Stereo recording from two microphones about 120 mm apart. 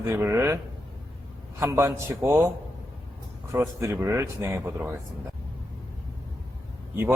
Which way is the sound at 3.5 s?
25° right (ahead or behind).